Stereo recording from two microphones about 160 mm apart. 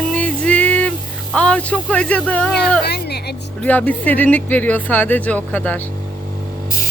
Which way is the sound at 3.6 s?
10° left (ahead or behind).